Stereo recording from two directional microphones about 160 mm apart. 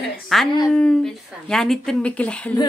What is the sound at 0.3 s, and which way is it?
Speech, centre (ahead or behind).